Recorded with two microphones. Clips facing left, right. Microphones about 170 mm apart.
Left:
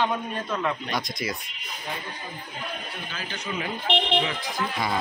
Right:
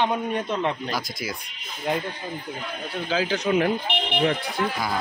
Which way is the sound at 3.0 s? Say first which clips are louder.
Right 14 dB; 90° right.